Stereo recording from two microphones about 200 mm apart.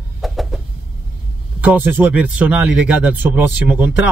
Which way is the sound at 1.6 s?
10° right (ahead or behind).